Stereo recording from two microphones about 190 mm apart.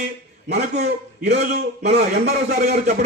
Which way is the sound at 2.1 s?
60° right (ahead or behind).